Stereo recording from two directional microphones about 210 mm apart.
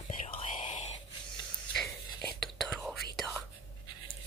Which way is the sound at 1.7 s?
5° left (ahead or behind).